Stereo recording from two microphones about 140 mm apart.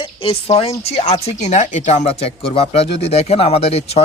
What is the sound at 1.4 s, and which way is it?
A man's voice, 55° left (ahead or behind).